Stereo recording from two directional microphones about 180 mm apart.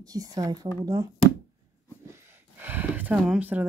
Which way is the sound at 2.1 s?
10° right (ahead or behind).